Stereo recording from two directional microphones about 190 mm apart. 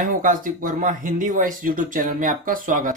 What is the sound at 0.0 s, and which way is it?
Speech, 45° right (ahead or behind).